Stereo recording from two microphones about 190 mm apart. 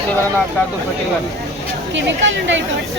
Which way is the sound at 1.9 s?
75° right (ahead or behind).